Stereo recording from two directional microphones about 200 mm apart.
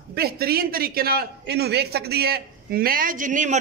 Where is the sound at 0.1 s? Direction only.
50° right (ahead or behind).